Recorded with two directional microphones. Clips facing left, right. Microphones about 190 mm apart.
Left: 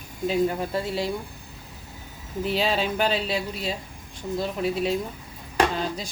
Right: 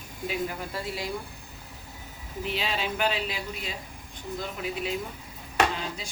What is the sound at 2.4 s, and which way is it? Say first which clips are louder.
Speech: left 6 dB; 35° left (ahead or behind).